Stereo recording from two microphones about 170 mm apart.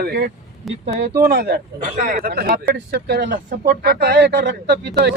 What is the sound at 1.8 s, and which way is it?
Speech, 50° right (ahead or behind).